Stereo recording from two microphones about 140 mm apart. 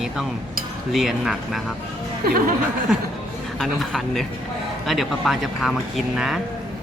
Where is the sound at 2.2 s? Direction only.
90° right.